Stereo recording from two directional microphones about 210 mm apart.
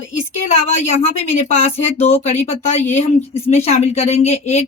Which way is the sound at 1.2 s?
30° left (ahead or behind).